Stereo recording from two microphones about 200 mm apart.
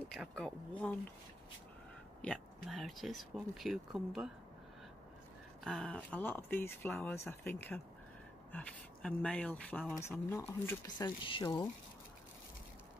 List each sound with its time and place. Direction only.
0.1 s speech: 5° left (ahead or behind)
2.2 s speech: 5° left (ahead or behind)
5.6 s speech: 5° left (ahead or behind); by 11.6 s 25° left (ahead or behind)